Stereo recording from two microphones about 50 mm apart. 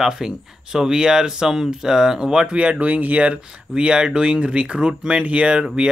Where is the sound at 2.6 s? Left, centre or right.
Right.